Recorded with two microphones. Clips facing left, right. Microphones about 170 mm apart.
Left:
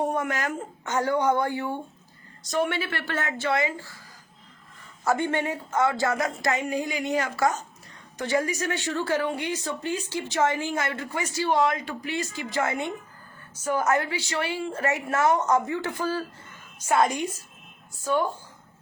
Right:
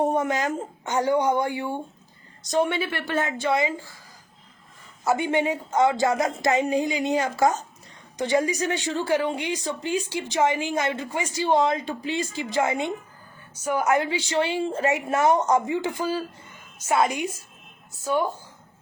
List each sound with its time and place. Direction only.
0.0 s speech: 20° right (ahead or behind)
5.0 s a woman's voice: 10° right (ahead or behind)